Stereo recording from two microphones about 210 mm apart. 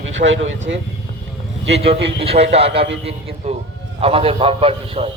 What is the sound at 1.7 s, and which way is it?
A man's voice, 30° right (ahead or behind).